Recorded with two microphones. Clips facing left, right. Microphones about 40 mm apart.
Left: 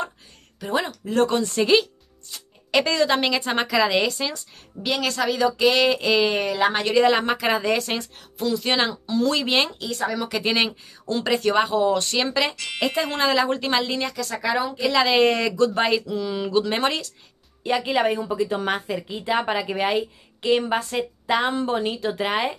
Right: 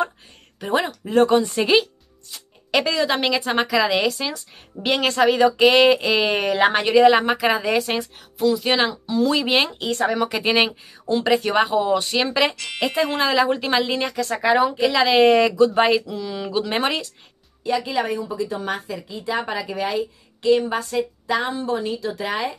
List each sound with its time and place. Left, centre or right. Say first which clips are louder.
0.6 s a woman's voice: right 3 dB; right; by 4.4 s centre
4.7 s speech: right 5 dB; right
7.0 s a woman's voice: right 5 dB; centre
9.8 s speech: right 5 dB; right
10.3 s speech: right 3 dB; centre
12.5 s a woman's voice: right 2 dB; centre
14.2 s speech: right 8 dB; right
14.9 s a woman's voice: right 2 dB; centre
17.6 s a woman's voice: left 1 dB; left